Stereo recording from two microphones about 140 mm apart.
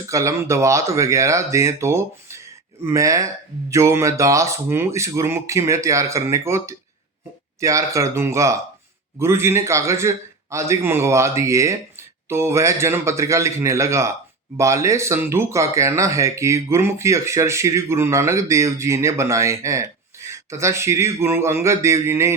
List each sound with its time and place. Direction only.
0.1 s speech: 20° right (ahead or behind)